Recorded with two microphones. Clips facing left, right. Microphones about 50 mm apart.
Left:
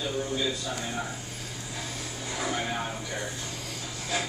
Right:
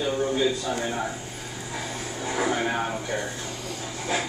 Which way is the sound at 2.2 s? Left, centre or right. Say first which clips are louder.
Right 6 dB; right.